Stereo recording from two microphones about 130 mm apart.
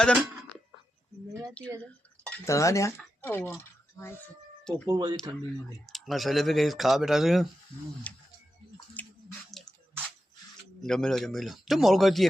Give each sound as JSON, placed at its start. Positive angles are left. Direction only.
{"t": 0.0, "sound": "speech", "side_deg": 5}
{"t": 2.4, "sound": "speech", "side_deg": 25}
{"t": 4.9, "sound": "speech", "side_deg": -30}
{"t": 5.8, "sound": "speech", "side_deg": 0}
{"t": 8.1, "sound": "music", "side_deg": 10}
{"t": 9.0, "sound": "a sound", "side_deg": 10}
{"t": 10.8, "sound": "speech", "side_deg": 5}